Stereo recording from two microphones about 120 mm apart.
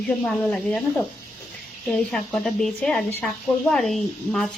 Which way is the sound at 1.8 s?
5° left (ahead or behind).